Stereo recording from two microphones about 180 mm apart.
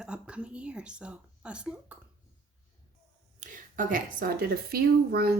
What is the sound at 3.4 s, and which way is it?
A woman's voice, 45° right (ahead or behind).